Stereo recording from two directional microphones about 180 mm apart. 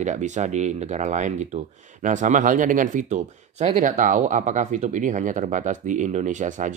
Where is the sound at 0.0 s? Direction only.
45° right (ahead or behind).